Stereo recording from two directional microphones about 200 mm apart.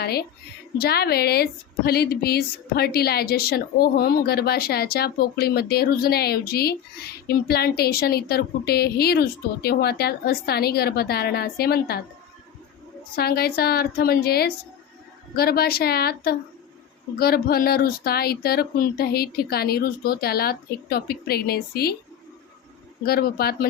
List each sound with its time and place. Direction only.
0.0 s a woman's voice: 50° left (ahead or behind)
13.1 s a woman's voice: 50° left (ahead or behind)
23.0 s a woman's voice: 50° left (ahead or behind)